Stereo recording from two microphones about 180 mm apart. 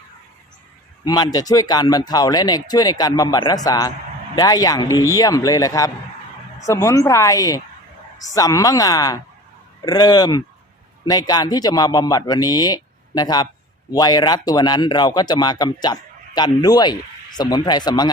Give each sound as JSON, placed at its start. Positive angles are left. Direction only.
{"t": 1.0, "sound": "speech", "side_deg": 25}